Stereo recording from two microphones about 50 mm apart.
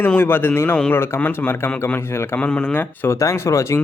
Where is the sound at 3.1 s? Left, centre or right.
Left.